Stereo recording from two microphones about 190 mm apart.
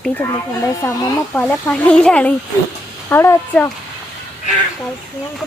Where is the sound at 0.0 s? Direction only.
10° left (ahead or behind).